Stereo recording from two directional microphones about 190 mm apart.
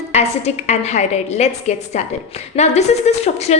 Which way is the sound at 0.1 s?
35° left (ahead or behind).